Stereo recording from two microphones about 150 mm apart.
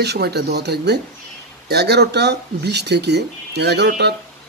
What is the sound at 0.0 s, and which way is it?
Speech, 90° right.